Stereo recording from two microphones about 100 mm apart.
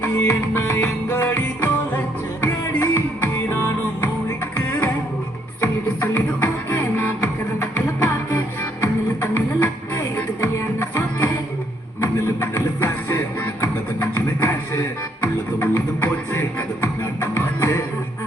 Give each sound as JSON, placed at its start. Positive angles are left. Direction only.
{"t": 0.3, "sound": "music", "side_deg": 20}
{"t": 5.5, "sound": "music", "side_deg": 20}